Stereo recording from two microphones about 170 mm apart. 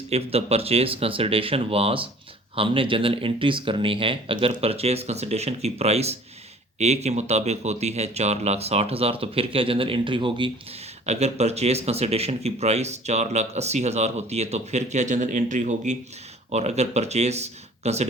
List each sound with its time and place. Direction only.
0.1 s speech: 35° right (ahead or behind)
11.0 s speech: 40° right (ahead or behind)